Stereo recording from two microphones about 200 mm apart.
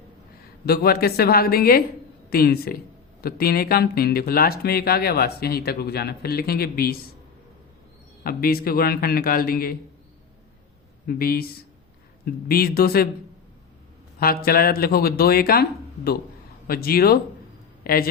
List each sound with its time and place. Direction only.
0.6 s speech: 50° left (ahead or behind)
8.2 s speech: 50° left (ahead or behind)
11.0 s speech: 50° left (ahead or behind)
14.2 s speech: 50° left (ahead or behind)
16.6 s a woman's voice: 50° left (ahead or behind)